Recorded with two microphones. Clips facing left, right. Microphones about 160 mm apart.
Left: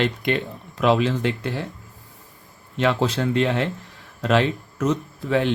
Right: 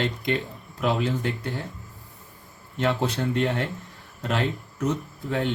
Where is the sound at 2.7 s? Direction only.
90° left.